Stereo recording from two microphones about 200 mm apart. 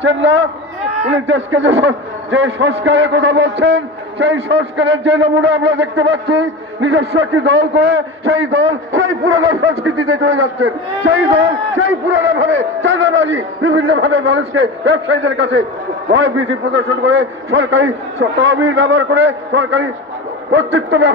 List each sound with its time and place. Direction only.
0.0 s a man's voice: 65° right (ahead or behind)
18.4 s a man's voice: 60° right (ahead or behind)